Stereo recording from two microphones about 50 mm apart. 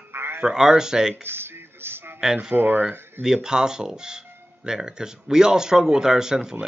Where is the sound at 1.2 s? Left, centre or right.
Right.